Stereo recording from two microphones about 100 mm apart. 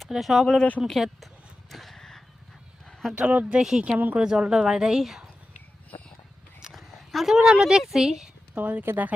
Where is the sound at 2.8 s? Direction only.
Centre (ahead or behind).